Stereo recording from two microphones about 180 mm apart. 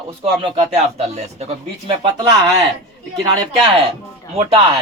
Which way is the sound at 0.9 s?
35° right (ahead or behind).